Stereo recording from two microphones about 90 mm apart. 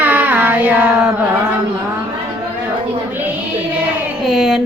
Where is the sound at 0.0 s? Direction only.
20° right (ahead or behind).